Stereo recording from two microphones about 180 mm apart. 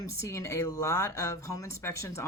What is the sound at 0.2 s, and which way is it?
A woman's voice, 15° left (ahead or behind).